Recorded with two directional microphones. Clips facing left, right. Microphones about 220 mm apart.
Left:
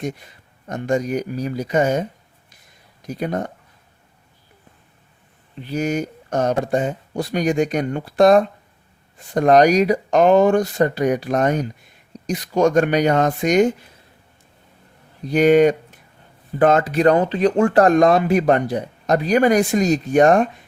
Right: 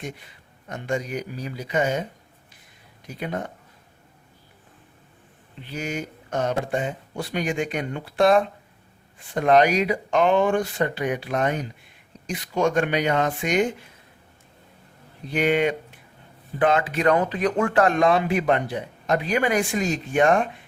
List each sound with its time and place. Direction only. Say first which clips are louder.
0.7 s speech: left 7 dB; 45° left (ahead or behind)
5.7 s speech: left 8 dB; 40° left (ahead or behind)
15.2 s speech: left 8 dB; 40° left (ahead or behind)